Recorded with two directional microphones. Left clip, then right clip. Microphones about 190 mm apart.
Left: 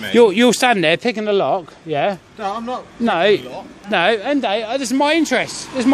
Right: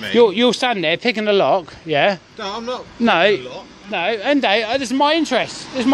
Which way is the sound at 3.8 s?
35° left (ahead or behind).